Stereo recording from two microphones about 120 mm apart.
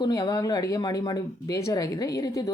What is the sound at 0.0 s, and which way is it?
Speech, 35° left (ahead or behind).